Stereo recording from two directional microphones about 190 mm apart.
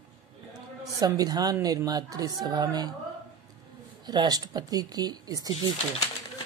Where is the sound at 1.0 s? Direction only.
20° right (ahead or behind).